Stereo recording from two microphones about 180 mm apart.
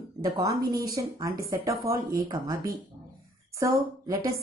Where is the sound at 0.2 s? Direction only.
20° right (ahead or behind).